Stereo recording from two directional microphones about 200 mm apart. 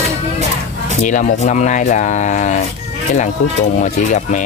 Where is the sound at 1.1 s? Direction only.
35° left (ahead or behind).